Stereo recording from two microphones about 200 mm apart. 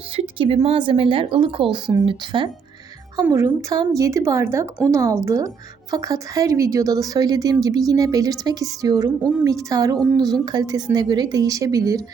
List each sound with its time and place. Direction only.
0.2 s a woman's voice: 30° right (ahead or behind)
3.2 s a woman's voice: 15° right (ahead or behind)